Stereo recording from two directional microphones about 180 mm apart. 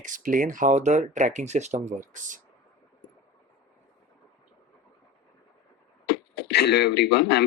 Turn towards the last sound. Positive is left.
turn(degrees=70)  # may be behind; listen again after turning